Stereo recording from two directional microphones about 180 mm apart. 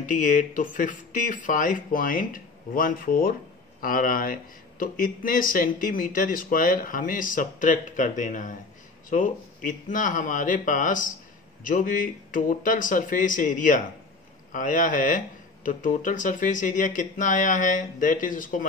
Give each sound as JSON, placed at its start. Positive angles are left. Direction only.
{"t": 0.0, "sound": "speech", "side_deg": 45}